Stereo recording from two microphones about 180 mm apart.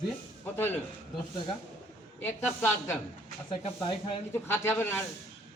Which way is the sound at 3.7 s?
25° left (ahead or behind).